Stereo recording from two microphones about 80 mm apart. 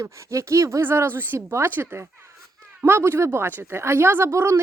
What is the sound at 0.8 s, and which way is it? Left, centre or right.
Speech, right.